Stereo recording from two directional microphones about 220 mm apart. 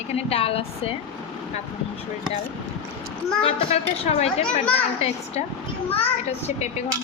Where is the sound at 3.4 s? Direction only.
25° left (ahead or behind).